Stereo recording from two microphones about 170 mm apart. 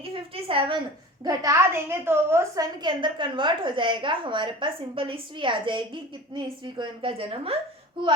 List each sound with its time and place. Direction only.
0.0 s a woman's voice: 35° right (ahead or behind)
1.2 s a woman's voice: 20° right (ahead or behind)
2.8 s a woman's voice: 30° right (ahead or behind)